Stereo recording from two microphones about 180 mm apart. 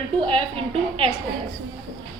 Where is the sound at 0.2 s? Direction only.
30° right (ahead or behind).